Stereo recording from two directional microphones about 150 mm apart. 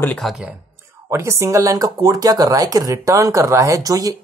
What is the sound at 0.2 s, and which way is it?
Speech, centre (ahead or behind).